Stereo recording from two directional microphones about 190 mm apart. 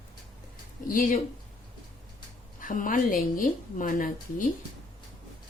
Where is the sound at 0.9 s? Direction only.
45° left (ahead or behind).